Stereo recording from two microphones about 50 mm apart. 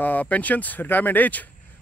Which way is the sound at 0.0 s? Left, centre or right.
Left.